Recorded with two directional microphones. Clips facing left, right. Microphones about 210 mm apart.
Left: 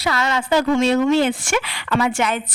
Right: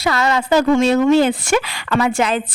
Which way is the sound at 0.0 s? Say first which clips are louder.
Right 4 dB; 40° right (ahead or behind).